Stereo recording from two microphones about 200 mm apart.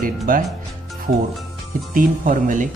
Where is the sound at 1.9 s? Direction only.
40° right (ahead or behind).